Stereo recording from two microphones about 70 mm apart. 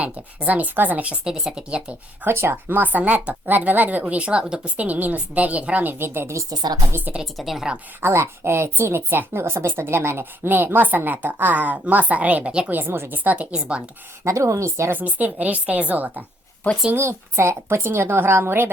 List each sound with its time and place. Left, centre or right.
0.0 s speech: right
1.2 s speech: centre
2.2 s speech: right
6.6 s a woman's voice: right
7.3 s speech: centre
8.0 s speech: right; by 12.7 s centre
12.7 s speech: right; by 13.8 s centre
14.3 s a woman's voice: right
14.9 s speech: right
16.9 s speech: right